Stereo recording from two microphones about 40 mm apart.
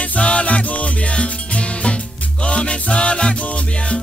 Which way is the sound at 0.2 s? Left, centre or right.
Left.